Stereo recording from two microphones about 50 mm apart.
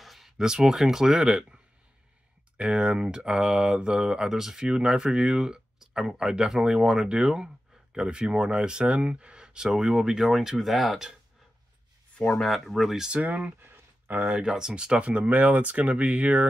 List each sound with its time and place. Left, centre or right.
0.0 s a sound: centre
0.4 s speech: centre
12.4 s speech: centre
13.1 s speech: right
13.6 s a sound: right
14.3 s speech: centre